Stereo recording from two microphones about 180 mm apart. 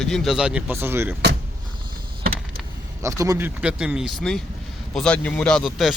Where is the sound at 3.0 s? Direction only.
20° right (ahead or behind).